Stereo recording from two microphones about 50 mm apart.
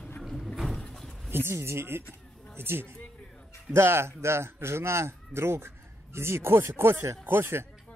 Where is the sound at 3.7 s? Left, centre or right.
Right.